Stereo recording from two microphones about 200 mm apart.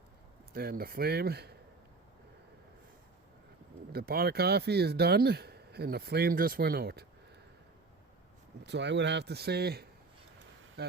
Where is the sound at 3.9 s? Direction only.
50° right (ahead or behind).